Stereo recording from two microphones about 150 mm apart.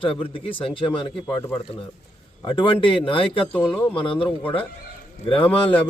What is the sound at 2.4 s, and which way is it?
Speech, 35° left (ahead or behind).